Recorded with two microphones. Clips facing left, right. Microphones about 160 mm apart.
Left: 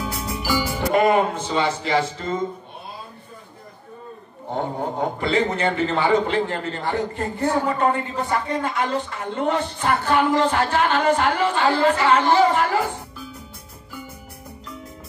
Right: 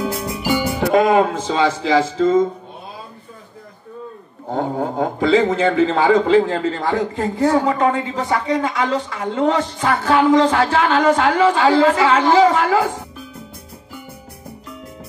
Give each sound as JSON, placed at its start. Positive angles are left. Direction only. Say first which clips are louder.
{"t": 0.0, "sound": "music", "louder": "right 5 dB", "side_deg": -20}
{"t": 0.9, "sound": "a man's voice", "louder": "right 3 dB", "side_deg": -90}
{"t": 4.6, "sound": "a man's voice", "louder": "right 4 dB", "side_deg": -90}